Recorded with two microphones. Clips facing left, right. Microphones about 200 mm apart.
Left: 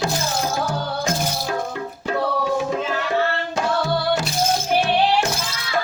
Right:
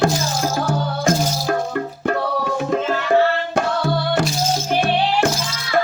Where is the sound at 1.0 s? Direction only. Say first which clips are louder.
Right 8 dB; 55° right (ahead or behind).